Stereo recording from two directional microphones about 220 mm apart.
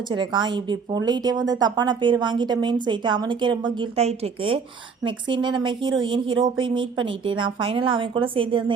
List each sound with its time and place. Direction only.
0.1 s speech: 20° right (ahead or behind)